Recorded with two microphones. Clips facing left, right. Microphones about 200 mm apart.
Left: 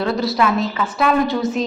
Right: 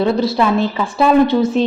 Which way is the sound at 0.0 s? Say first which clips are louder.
Right 4 dB; 25° right (ahead or behind).